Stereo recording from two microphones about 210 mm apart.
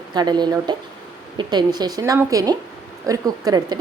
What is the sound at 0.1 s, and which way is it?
A woman's voice, 20° right (ahead or behind).